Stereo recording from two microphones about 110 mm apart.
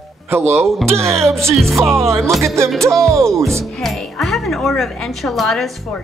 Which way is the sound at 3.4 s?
5° left (ahead or behind).